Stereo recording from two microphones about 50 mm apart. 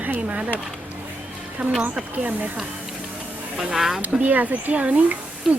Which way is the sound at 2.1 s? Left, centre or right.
Right.